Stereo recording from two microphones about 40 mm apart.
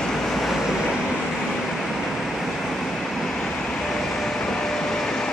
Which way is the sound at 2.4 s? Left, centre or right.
Centre.